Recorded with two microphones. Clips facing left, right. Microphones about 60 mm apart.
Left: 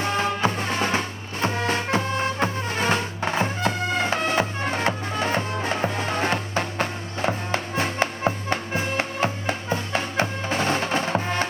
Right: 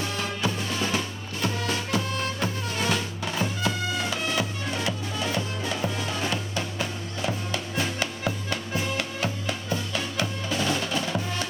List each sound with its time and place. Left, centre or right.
0.0 s music: left